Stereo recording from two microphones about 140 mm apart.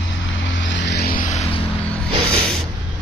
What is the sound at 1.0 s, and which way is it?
Vehicle, 80° left.